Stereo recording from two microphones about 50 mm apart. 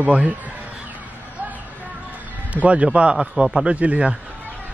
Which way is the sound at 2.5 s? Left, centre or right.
Right.